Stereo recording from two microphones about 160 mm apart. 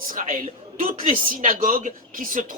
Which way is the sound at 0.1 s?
50° right (ahead or behind).